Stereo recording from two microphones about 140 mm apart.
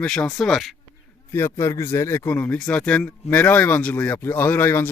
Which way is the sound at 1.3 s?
20° left (ahead or behind).